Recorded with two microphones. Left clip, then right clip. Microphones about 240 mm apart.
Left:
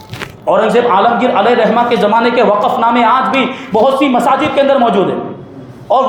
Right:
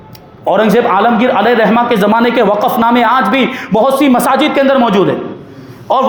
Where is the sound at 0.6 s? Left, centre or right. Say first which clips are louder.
Even; right.